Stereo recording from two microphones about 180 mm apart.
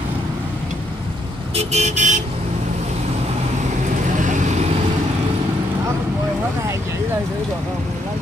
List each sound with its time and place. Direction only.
1.5 s vehicle: 35° right (ahead or behind)
4.2 s vehicle: 45° right (ahead or behind)